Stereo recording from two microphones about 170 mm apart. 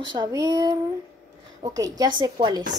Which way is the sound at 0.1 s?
25° right (ahead or behind).